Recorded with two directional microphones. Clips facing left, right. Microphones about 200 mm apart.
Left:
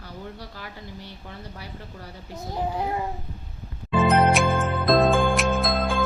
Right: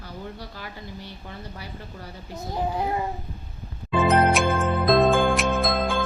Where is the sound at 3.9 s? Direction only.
Centre (ahead or behind).